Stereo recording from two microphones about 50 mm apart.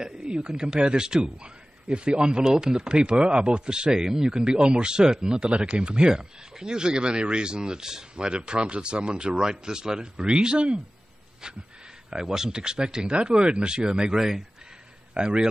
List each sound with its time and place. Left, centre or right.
0.0 s a man's voice: centre